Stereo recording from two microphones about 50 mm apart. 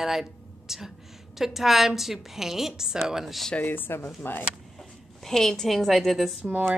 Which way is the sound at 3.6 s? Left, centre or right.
Left.